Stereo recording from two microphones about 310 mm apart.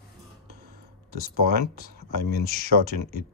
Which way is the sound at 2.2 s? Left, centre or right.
Left.